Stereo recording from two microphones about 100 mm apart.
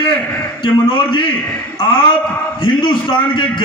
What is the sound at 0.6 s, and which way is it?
Speech, 55° left (ahead or behind).